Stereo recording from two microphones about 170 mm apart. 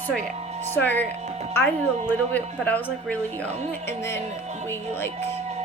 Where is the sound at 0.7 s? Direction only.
10° left (ahead or behind).